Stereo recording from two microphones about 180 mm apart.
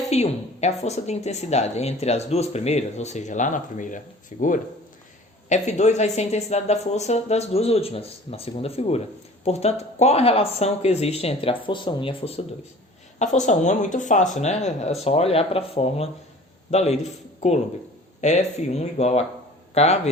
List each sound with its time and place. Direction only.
0.1 s a woman's voice: 40° left (ahead or behind)
13.1 s a woman's voice: 40° left (ahead or behind)